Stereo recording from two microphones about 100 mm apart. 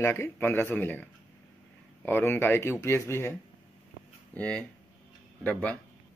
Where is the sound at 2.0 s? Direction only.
20° left (ahead or behind).